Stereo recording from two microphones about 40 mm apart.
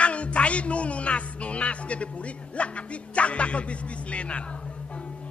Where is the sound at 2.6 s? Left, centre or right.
Left.